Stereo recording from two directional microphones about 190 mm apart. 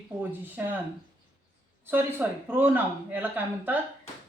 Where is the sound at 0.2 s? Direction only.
10° right (ahead or behind).